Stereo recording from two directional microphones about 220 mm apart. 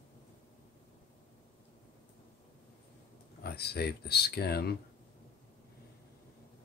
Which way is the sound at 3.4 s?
45° left (ahead or behind).